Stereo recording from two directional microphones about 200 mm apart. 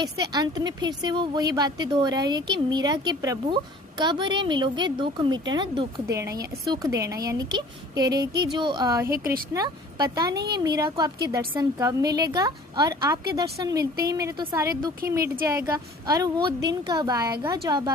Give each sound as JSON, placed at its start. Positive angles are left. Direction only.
{"t": 0.0, "sound": "a woman's voice", "side_deg": -20}
{"t": 9.0, "sound": "speech", "side_deg": -45}
{"t": 9.5, "sound": "a woman's voice", "side_deg": -20}
{"t": 10.3, "sound": "a woman's voice", "side_deg": -55}
{"t": 10.6, "sound": "a woman's voice", "side_deg": -20}